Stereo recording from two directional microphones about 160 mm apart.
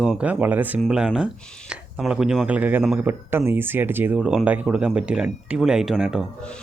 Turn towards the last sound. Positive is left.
turn(degrees=-5)  # may be behind; listen again after turning